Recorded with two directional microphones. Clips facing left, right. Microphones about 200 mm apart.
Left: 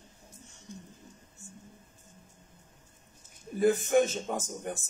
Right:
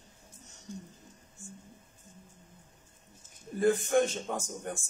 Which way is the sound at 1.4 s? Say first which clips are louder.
Right 5 dB; 40° left (ahead or behind).